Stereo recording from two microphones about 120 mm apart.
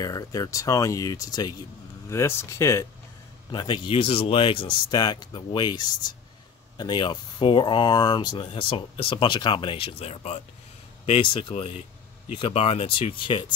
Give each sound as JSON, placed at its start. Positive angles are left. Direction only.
{"t": 0.0, "sound": "speech", "side_deg": 30}
{"t": 3.5, "sound": "speech", "side_deg": 40}
{"t": 11.1, "sound": "speech", "side_deg": 45}